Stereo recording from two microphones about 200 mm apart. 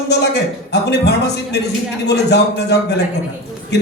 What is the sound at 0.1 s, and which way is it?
A man's voice, 55° left (ahead or behind).